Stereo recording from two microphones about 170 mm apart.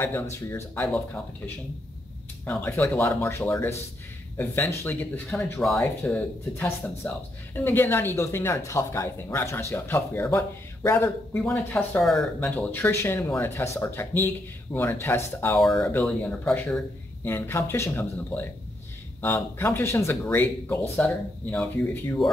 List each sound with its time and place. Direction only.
0.0 s speech: 10° left (ahead or behind)
5.3 s speech: centre (ahead or behind)
15.6 s speech: centre (ahead or behind)